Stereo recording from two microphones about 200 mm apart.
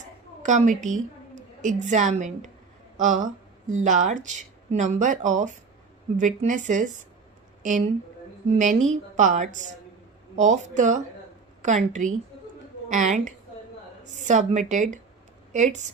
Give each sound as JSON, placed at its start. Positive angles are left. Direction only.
{"t": 0.4, "sound": "a woman's voice", "side_deg": -40}